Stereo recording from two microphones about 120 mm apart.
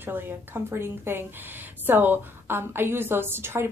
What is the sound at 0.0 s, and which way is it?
A woman's voice, 15° right (ahead or behind).